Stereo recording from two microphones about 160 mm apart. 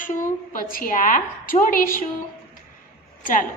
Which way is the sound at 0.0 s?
55° left (ahead or behind).